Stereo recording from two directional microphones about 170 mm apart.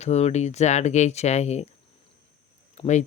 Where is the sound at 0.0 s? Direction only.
40° left (ahead or behind).